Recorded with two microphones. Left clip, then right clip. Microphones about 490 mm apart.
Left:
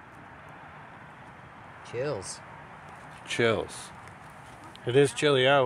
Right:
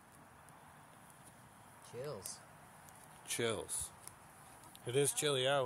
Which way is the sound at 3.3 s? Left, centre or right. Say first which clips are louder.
Left 13 dB; right.